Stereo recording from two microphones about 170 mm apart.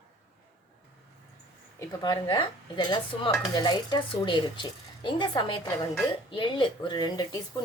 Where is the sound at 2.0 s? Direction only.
25° left (ahead or behind).